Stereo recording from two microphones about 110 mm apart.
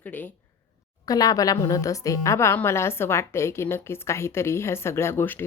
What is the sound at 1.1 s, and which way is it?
A woman's voice, 35° left (ahead or behind).